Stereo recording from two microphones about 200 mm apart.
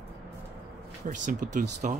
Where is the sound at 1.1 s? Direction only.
40° right (ahead or behind).